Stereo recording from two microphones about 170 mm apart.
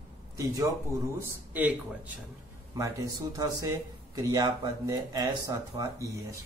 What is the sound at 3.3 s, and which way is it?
Speech, 20° right (ahead or behind).